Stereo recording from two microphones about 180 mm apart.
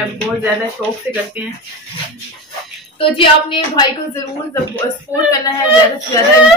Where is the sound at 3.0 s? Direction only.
30° left (ahead or behind).